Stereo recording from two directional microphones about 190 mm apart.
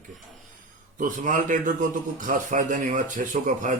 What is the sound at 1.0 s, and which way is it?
A man's voice, 45° right (ahead or behind).